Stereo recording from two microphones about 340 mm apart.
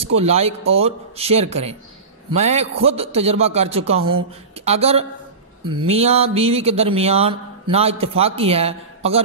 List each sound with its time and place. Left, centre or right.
0.0 s speech: centre